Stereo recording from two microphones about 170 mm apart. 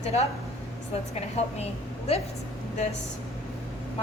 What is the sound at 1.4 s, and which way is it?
Speech, 40° left (ahead or behind).